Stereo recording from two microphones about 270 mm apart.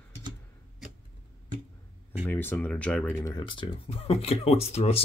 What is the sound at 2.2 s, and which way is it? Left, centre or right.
Speech, centre.